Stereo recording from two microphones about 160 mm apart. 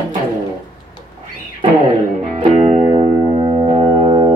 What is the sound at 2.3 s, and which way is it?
Music, 40° right (ahead or behind).